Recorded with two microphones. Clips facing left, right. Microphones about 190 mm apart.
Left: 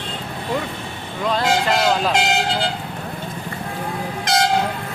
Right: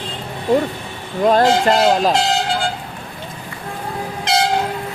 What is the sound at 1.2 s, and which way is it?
Speech, 45° right (ahead or behind).